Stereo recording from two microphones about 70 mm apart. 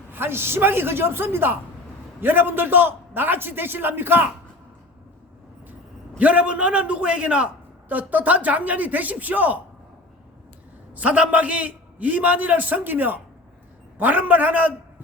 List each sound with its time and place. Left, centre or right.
0.1 s a man's voice: right
6.1 s a man's voice: centre
10.9 s a man's voice: right